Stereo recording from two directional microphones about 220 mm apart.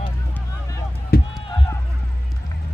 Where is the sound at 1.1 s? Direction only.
45° left (ahead or behind).